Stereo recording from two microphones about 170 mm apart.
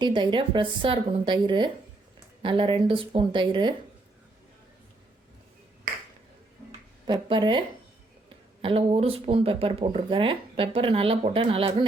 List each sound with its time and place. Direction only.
0.0 s a woman's voice: 25° right (ahead or behind)
7.1 s a woman's voice: 30° right (ahead or behind)